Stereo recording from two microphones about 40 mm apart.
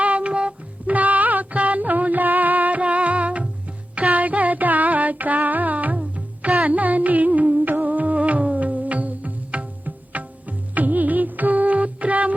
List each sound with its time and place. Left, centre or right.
0.0 s music: right
0.9 s music: right